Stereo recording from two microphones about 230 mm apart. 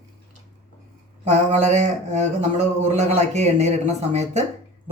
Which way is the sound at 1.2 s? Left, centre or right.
Right.